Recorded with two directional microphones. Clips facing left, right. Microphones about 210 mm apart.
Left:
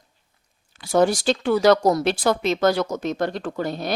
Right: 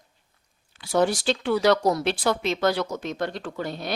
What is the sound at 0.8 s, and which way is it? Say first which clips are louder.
Speech: left 4 dB; 45° left (ahead or behind).